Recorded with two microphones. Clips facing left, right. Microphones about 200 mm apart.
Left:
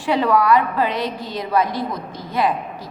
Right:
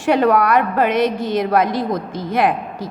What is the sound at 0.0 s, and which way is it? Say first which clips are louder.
Speech: right 3 dB; 50° right (ahead or behind).